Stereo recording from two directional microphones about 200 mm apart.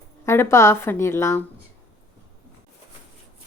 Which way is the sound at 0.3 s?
15° left (ahead or behind).